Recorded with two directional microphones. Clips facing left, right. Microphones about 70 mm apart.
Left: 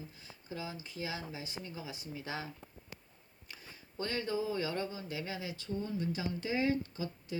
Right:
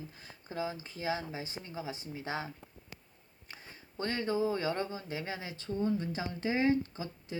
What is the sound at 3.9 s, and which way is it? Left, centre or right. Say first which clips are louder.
Speech: right 3 dB; right.